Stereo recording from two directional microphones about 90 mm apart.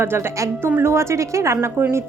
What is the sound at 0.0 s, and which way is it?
A woman's voice, 30° right (ahead or behind).